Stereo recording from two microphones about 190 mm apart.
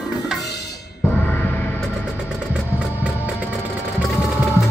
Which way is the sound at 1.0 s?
10° left (ahead or behind).